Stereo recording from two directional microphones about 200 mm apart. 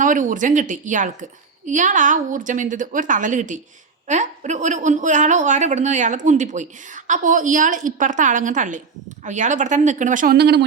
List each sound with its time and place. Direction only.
0.0 s a woman's voice: 40° right (ahead or behind)